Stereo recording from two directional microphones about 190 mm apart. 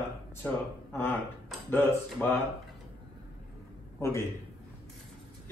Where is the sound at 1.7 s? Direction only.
10° left (ahead or behind).